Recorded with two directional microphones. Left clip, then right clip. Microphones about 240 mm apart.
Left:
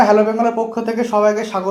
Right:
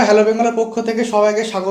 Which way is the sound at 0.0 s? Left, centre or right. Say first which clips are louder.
Even; centre.